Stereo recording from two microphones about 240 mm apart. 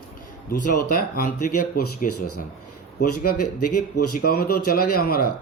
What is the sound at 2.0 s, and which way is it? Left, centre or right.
Speech, left.